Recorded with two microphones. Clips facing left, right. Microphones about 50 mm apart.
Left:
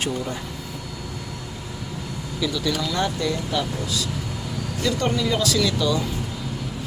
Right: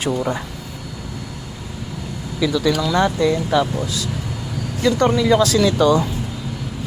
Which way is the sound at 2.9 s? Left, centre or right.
Right.